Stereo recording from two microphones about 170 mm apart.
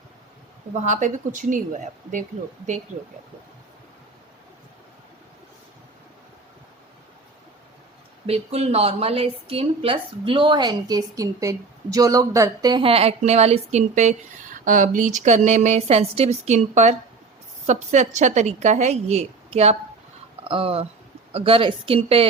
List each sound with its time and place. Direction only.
0.8 s a woman's voice: 45° right (ahead or behind)
8.3 s a woman's voice: 40° right (ahead or behind)